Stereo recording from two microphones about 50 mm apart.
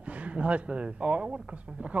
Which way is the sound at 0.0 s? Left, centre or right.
Right.